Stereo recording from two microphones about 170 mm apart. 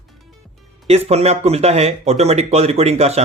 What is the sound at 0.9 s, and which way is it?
Speech, 40° right (ahead or behind).